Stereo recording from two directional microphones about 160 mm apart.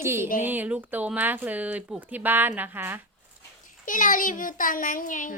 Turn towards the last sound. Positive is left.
turn(degrees=55)  # may be behind; listen again after turning